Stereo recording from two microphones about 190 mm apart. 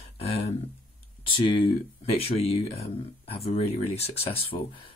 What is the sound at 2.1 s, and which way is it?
Speech, 30° left (ahead or behind).